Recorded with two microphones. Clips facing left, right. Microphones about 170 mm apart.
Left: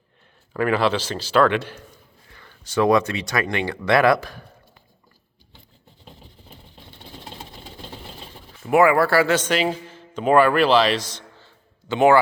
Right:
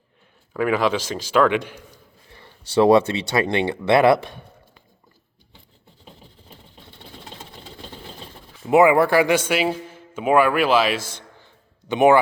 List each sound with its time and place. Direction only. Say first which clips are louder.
0.5 s speech: even; 10° right (ahead or behind)
2.3 s speech: right 4 dB; 30° right (ahead or behind)
8.6 s a man's voice: right 2 dB; 20° right (ahead or behind)